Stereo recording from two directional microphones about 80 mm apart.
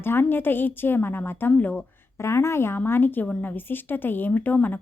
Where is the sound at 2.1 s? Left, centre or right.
Left.